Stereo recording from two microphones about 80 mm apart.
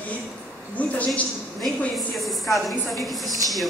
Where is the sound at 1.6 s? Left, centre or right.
Centre.